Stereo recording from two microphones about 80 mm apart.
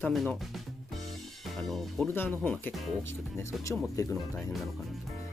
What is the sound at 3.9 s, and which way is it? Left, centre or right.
Speech, left.